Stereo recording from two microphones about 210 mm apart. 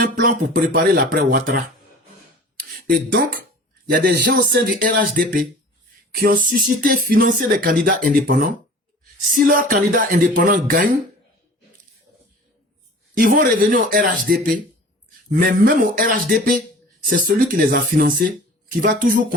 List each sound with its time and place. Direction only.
0.0 s speech: 40° right (ahead or behind)
2.6 s a sound: 45° right (ahead or behind)
3.9 s speech: 40° right (ahead or behind)
13.1 s speech: 45° right (ahead or behind)